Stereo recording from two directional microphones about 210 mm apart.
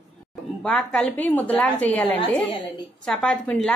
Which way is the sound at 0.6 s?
Centre (ahead or behind).